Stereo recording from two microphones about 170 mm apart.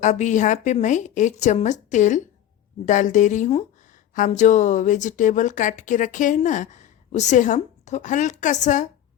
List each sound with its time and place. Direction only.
0.0 s speech: 45° left (ahead or behind)